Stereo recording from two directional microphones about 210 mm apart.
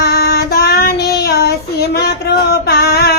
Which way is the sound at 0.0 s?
50° left (ahead or behind).